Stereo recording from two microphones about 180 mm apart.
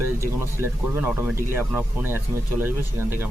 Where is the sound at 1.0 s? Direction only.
10° right (ahead or behind).